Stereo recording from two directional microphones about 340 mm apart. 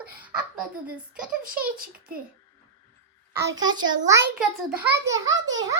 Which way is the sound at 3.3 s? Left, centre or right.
Centre.